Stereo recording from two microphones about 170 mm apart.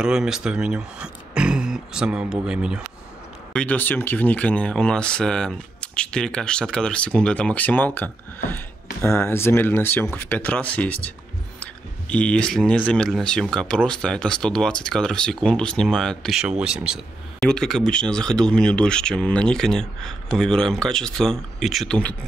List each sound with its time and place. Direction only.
0.0 s speech: 5° right (ahead or behind)
3.5 s speech: 10° left (ahead or behind)